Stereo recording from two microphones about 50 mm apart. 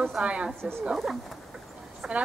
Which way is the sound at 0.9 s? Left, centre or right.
Centre.